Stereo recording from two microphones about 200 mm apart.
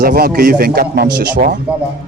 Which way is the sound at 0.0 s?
45° right (ahead or behind).